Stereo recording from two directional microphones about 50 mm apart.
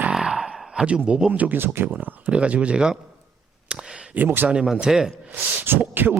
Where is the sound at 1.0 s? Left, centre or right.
Right.